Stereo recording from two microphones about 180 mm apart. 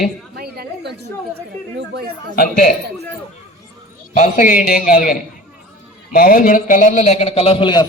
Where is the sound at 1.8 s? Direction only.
60° right (ahead or behind).